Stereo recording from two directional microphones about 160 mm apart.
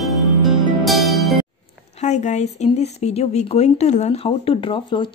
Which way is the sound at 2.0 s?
45° left (ahead or behind).